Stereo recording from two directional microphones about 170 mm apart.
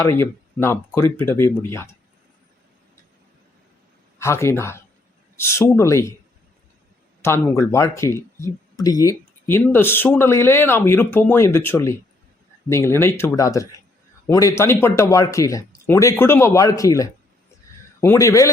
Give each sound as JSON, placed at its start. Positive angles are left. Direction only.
{"t": 0.0, "sound": "speech", "side_deg": 15}
{"t": 4.2, "sound": "speech", "side_deg": 15}
{"t": 7.2, "sound": "speech", "side_deg": 15}